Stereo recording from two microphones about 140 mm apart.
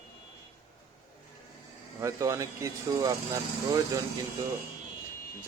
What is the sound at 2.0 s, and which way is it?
Speech, 20° right (ahead or behind).